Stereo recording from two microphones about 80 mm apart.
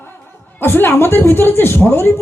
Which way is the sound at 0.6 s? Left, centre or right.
Left.